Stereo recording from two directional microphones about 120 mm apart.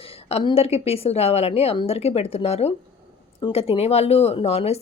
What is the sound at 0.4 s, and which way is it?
Speech, 55° left (ahead or behind).